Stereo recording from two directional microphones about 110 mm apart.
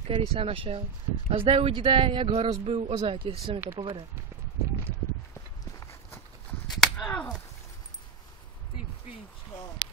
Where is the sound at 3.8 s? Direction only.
45° right (ahead or behind).